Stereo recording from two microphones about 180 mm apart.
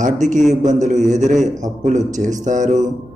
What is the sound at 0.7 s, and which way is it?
A man's voice, 40° right (ahead or behind).